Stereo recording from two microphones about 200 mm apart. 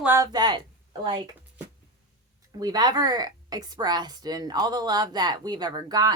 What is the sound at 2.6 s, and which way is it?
Speech, 20° right (ahead or behind).